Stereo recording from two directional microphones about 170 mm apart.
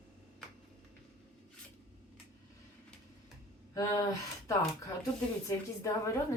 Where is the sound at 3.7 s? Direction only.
20° left (ahead or behind).